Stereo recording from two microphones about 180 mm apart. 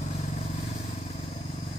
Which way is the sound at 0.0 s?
40° left (ahead or behind).